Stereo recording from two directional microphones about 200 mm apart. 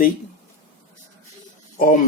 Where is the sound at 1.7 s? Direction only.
40° left (ahead or behind).